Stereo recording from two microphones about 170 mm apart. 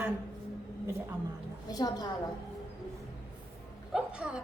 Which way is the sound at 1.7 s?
20° left (ahead or behind).